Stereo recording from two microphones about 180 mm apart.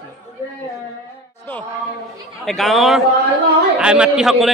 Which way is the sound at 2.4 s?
Centre (ahead or behind).